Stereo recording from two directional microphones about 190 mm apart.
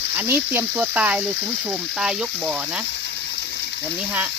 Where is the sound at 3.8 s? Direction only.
10° right (ahead or behind).